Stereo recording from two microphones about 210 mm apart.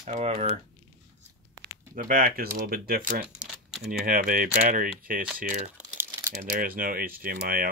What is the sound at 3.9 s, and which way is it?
Speech, 45° right (ahead or behind).